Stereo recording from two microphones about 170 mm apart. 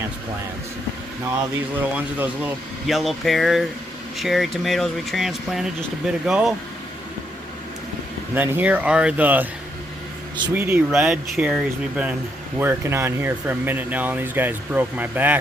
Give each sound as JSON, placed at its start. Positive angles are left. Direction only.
{"t": 2.1, "sound": "speech", "side_deg": -10}
{"t": 8.4, "sound": "speech", "side_deg": -10}
{"t": 10.5, "sound": "speech", "side_deg": -10}